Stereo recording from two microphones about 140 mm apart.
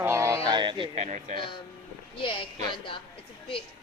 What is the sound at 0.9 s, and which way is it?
Speech, 55° right (ahead or behind).